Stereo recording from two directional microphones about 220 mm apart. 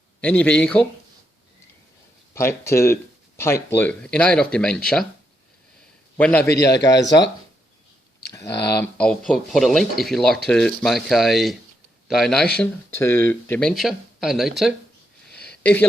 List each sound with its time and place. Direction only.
0.2 s speech: 5° left (ahead or behind)
2.3 s speech: 10° left (ahead or behind)
6.1 s speech: 5° left (ahead or behind)
6.5 s a man's voice: 50° left (ahead or behind)
8.3 s a sound: 15° left (ahead or behind)
8.8 s speech: 5° left (ahead or behind)
15.4 s a sound: 5° left (ahead or behind)